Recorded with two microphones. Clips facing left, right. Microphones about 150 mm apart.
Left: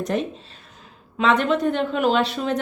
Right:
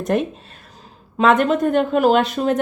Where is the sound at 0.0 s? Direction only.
55° right (ahead or behind).